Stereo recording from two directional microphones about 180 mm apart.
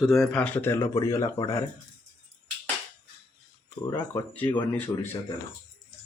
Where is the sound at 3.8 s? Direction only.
15° left (ahead or behind).